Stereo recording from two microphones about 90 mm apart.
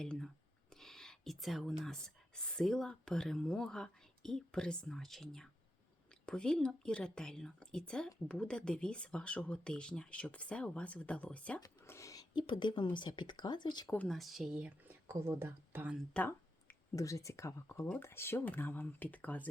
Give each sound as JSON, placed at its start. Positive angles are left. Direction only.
{"t": 0.0, "sound": "speech", "side_deg": 5}
{"t": 11.9, "sound": "a sound", "side_deg": 35}
{"t": 12.3, "sound": "speech", "side_deg": 60}
{"t": 13.8, "sound": "speech", "side_deg": 20}
{"t": 14.1, "sound": "speech", "side_deg": 0}
{"t": 16.1, "sound": "a sound", "side_deg": 20}
{"t": 16.9, "sound": "speech", "side_deg": 35}